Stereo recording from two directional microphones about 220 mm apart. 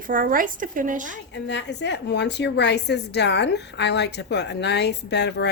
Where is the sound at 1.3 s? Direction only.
55° left (ahead or behind).